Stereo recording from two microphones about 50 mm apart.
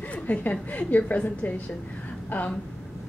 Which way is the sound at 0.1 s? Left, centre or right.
Left.